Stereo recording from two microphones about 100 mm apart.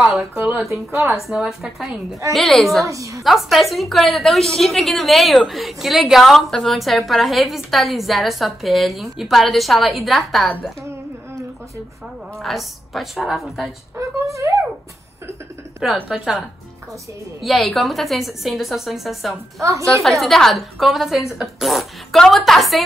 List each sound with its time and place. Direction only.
0.0 s speech: 10° right (ahead or behind)
1.2 s a woman's voice: 5° right (ahead or behind)
2.9 s speech: 35° right (ahead or behind)
3.3 s a woman's voice: centre (ahead or behind)
12.4 s a woman's voice: centre (ahead or behind)
13.9 s speech: 30° right (ahead or behind)
15.8 s a woman's voice: 5° right (ahead or behind)
19.6 s speech: 30° right (ahead or behind)
20.0 s a woman's voice: centre (ahead or behind)